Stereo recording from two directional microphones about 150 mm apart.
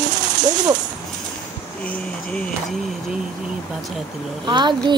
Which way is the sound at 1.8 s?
5° left (ahead or behind).